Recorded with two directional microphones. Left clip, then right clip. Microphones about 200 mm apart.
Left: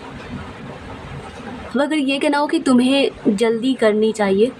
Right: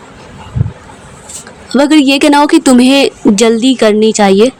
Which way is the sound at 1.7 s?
40° right (ahead or behind).